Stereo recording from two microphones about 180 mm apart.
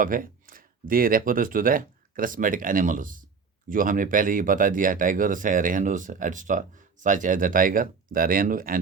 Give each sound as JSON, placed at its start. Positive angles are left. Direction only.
{"t": 0.0, "sound": "speech", "side_deg": -50}